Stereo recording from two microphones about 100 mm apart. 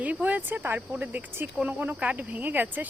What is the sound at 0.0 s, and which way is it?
Speech, 15° right (ahead or behind).